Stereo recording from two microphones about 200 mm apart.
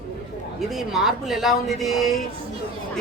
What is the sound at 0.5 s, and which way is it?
Speech, centre (ahead or behind).